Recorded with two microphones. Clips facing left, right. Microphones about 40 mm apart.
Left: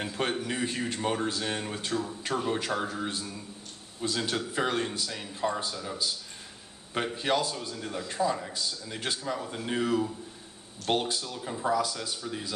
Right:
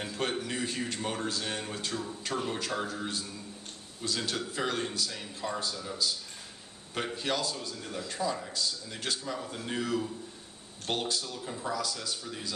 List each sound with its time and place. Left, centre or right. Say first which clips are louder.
0.0 s speech: left 2 dB; centre
7.2 s speech: left 5 dB; centre